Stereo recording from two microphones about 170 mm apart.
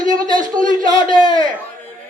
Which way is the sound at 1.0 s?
25° left (ahead or behind).